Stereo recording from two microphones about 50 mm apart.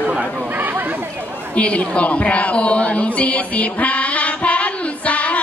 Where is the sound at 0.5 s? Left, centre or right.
Right.